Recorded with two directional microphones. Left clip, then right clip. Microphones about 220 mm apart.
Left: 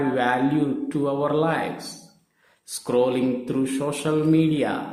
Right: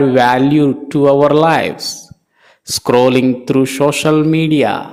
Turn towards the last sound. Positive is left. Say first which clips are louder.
# right 8 dB
turn(degrees=-40)  # may be behind; listen again after turning